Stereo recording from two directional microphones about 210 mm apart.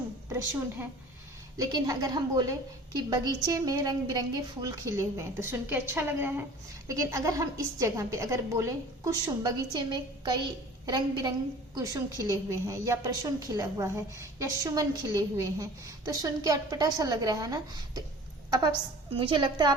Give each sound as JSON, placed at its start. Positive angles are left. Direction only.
{"t": 1.5, "sound": "a woman's voice", "side_deg": -20}
{"t": 19.1, "sound": "a woman's voice", "side_deg": -25}